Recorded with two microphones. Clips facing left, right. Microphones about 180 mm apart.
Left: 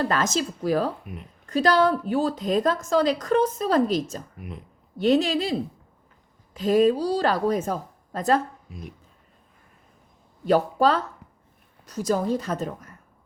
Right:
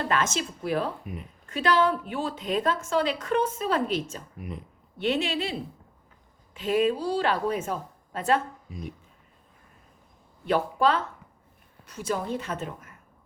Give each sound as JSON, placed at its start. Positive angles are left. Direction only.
{"t": 0.0, "sound": "a woman's voice", "side_deg": 40}
{"t": 1.0, "sound": "speech", "side_deg": 0}
{"t": 1.5, "sound": "a woman's voice", "side_deg": 40}
{"t": 4.4, "sound": "speech", "side_deg": 0}
{"t": 4.9, "sound": "a woman's voice", "side_deg": 40}
{"t": 8.7, "sound": "speech", "side_deg": 0}
{"t": 10.4, "sound": "a woman's voice", "side_deg": 40}